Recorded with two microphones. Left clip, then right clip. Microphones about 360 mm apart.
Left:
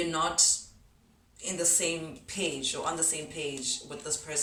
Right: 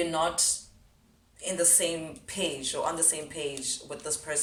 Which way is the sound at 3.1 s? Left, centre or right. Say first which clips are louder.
Right 1 dB; centre.